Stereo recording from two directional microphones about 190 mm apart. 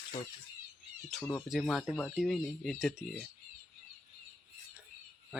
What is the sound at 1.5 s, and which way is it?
Speech, centre (ahead or behind).